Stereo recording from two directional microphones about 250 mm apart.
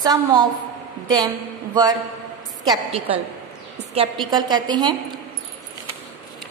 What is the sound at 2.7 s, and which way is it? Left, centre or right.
A woman's voice, right.